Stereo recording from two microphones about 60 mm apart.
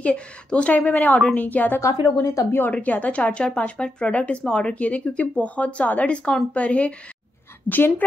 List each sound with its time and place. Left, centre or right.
0.0 s speech: centre
2.1 s a woman's voice: left
2.7 s a woman's voice: left